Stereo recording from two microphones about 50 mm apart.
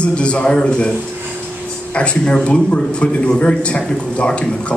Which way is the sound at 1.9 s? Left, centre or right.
Left.